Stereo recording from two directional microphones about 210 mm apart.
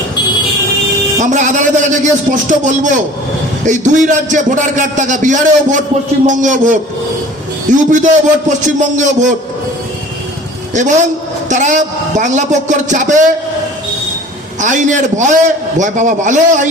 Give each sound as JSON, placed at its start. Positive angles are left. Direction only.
{"t": 1.2, "sound": "a man's voice", "side_deg": -35}
{"t": 10.8, "sound": "a man's voice", "side_deg": -35}
{"t": 14.6, "sound": "a man's voice", "side_deg": -35}